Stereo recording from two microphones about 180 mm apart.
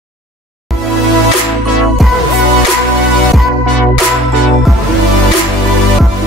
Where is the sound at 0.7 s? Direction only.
Centre (ahead or behind).